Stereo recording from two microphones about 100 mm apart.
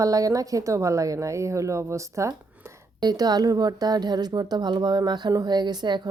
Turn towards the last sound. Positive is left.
turn(degrees=-45)  # may be behind; listen again after turning